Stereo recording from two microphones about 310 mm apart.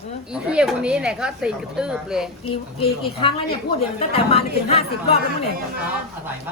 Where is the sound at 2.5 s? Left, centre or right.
Centre.